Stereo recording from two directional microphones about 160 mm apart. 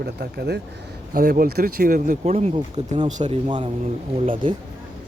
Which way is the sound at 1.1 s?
65° right (ahead or behind).